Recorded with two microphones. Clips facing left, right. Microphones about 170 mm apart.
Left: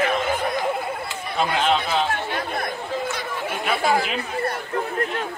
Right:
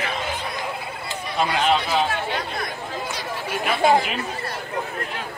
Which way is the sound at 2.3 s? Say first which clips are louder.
Left 2 dB; 55° left (ahead or behind).